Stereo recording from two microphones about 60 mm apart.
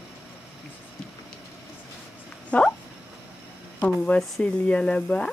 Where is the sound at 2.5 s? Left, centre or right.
Left.